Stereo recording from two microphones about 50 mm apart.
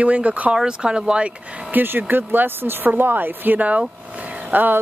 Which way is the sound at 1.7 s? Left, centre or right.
Right.